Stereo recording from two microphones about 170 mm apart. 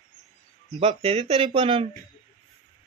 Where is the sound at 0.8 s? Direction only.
35° right (ahead or behind).